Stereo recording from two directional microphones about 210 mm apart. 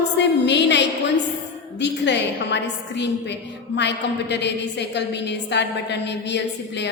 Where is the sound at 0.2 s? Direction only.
55° left (ahead or behind).